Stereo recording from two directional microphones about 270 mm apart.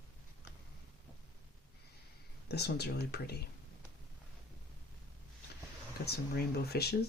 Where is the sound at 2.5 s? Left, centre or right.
Left.